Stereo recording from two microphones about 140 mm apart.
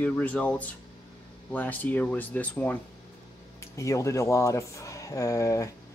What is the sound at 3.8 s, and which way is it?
Speech, 20° left (ahead or behind).